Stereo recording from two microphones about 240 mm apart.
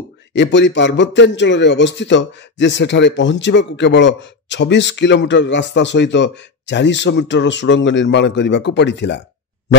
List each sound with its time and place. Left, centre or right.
0.3 s a man's voice: left